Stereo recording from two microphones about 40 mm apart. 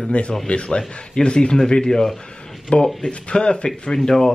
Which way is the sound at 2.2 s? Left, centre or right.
Left.